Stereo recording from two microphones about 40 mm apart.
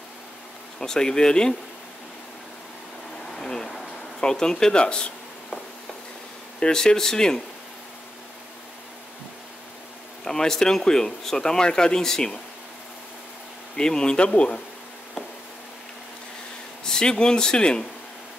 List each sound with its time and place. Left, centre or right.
0.7 s speech: centre
3.3 s a sound: centre
4.2 s speech: centre
6.6 s speech: centre
10.2 s speech: centre
13.7 s speech: centre
16.8 s speech: centre